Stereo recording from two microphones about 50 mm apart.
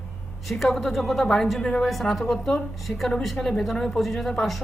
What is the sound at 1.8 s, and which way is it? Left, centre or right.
Speech, centre.